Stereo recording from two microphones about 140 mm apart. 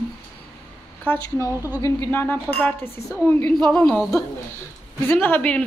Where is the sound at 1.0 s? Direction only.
15° left (ahead or behind).